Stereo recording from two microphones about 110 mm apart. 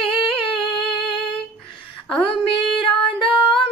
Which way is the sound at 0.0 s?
55° left (ahead or behind).